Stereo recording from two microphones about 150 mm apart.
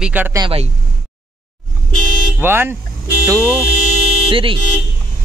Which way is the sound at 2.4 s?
15° right (ahead or behind).